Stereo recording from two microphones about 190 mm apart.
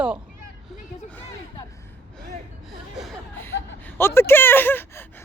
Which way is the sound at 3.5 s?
70° left (ahead or behind).